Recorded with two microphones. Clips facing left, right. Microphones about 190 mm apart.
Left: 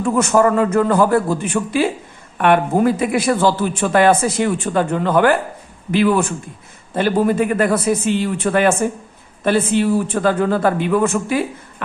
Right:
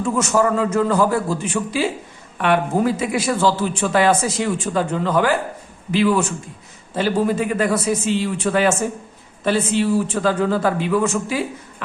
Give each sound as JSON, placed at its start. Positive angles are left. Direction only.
{"t": 0.0, "sound": "speech", "side_deg": 55}